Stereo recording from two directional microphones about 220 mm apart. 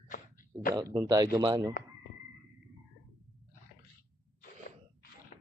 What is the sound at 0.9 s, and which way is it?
Speech, 15° right (ahead or behind).